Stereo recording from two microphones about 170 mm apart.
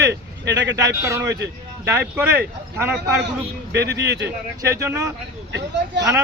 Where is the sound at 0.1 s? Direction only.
90° right.